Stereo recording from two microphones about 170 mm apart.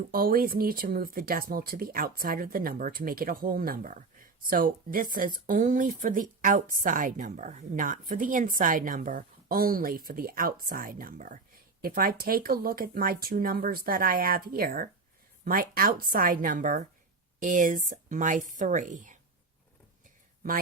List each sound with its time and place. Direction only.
0.1 s speech: 60° right (ahead or behind)